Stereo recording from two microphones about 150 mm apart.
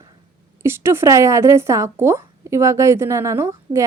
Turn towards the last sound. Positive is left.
turn(degrees=-20)  # may be behind; listen again after turning